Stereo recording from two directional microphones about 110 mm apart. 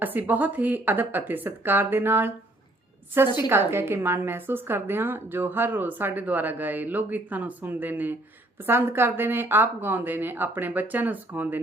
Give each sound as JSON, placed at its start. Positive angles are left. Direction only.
{"t": 0.0, "sound": "speech", "side_deg": -15}
{"t": 3.3, "sound": "a woman's voice", "side_deg": -20}